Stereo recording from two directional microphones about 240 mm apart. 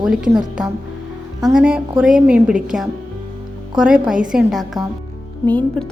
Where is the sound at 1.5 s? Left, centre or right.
Centre.